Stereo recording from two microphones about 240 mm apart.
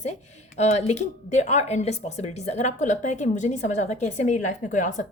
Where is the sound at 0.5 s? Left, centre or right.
Left.